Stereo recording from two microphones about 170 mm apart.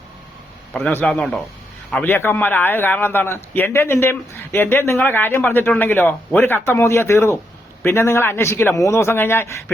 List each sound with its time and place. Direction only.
0.7 s a man's voice: 10° left (ahead or behind)